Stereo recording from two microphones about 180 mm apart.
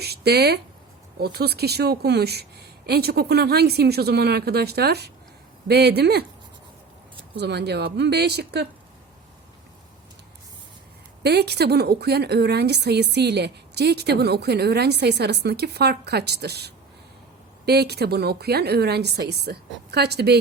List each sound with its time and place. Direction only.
0.0 s a sound: 65° right (ahead or behind)
1.2 s a woman's voice: 65° right (ahead or behind)
7.3 s speech: 65° right (ahead or behind)
11.2 s a woman's voice: 65° right (ahead or behind)